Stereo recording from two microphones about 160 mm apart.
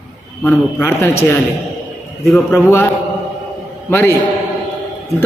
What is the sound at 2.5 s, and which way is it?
Speech, 15° left (ahead or behind).